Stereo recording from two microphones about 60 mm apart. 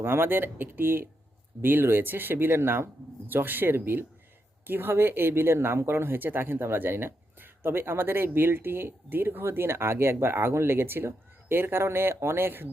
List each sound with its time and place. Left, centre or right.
0.0 s speech: right